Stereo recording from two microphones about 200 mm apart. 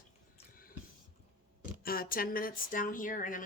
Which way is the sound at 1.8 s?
45° left (ahead or behind).